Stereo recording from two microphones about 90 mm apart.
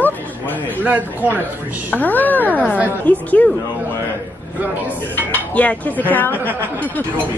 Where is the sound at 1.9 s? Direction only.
20° left (ahead or behind).